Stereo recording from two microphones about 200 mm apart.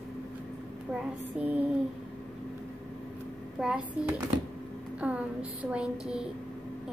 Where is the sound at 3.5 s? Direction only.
5° right (ahead or behind).